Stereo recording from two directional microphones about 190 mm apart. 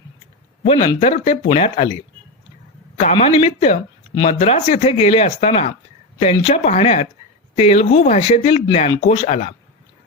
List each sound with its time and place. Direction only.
0.6 s speech: 30° left (ahead or behind)
3.1 s speech: 35° left (ahead or behind)